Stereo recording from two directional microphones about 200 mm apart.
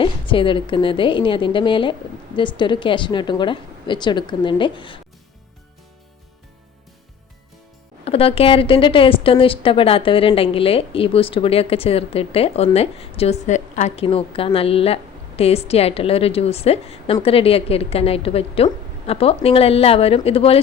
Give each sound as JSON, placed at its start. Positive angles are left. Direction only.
{"t": 0.0, "sound": "a woman's voice", "side_deg": 25}
{"t": 8.0, "sound": "a woman's voice", "side_deg": 30}